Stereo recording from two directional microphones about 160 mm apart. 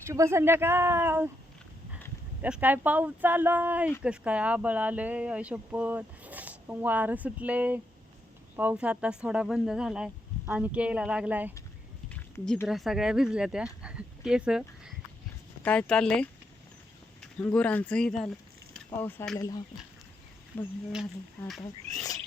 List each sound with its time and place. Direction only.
0.0 s speech: 20° right (ahead or behind)
2.4 s speech: 10° right (ahead or behind)
12.0 s a sound: 10° left (ahead or behind)
12.6 s speech: centre (ahead or behind)
13.8 s a sound: 5° right (ahead or behind)
15.6 s speech: 5° left (ahead or behind)
17.4 s speech: 10° left (ahead or behind)
19.4 s speech: 25° left (ahead or behind)
20.5 s speech: 10° left (ahead or behind)
20.9 s speech: centre (ahead or behind)